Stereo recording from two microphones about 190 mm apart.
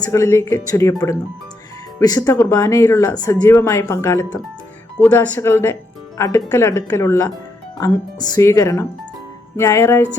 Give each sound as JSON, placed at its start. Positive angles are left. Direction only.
{"t": 0.0, "sound": "speech", "side_deg": 15}